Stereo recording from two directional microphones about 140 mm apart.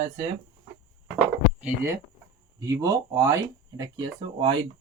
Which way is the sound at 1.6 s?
15° right (ahead or behind).